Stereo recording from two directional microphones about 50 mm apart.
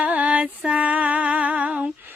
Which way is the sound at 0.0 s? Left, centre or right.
Right.